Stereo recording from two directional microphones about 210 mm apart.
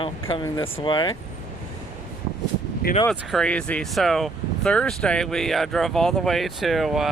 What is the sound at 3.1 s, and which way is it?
Speech, 5° left (ahead or behind).